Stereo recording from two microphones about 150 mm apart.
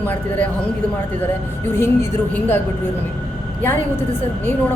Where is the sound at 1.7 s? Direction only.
15° left (ahead or behind).